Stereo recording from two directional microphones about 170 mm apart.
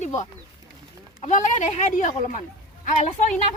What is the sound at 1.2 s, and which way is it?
Speech, 45° left (ahead or behind).